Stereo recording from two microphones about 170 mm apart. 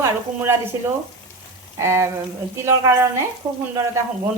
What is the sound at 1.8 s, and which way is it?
Speech, 15° right (ahead or behind).